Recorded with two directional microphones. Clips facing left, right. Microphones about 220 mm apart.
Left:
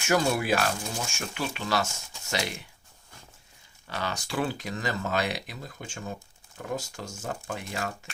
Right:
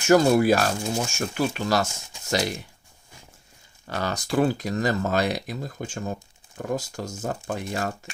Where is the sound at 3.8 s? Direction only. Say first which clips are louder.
Right 5 dB; 45° right (ahead or behind).